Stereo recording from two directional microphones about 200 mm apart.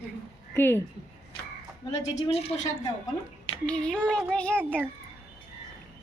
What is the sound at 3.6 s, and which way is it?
Child singing, 5° left (ahead or behind).